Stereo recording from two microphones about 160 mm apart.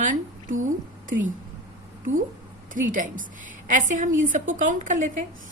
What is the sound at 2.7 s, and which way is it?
A woman's voice, 55° right (ahead or behind).